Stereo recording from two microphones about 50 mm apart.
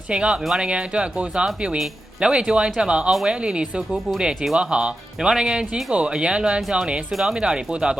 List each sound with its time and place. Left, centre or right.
0.1 s speech: right
7.1 s speech: centre
7.3 s speech: centre